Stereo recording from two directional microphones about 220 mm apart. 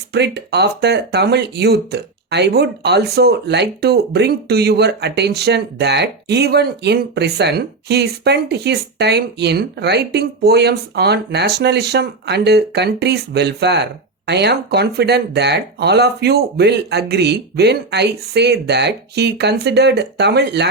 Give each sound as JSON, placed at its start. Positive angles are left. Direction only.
{"t": 0.1, "sound": "speech", "side_deg": -50}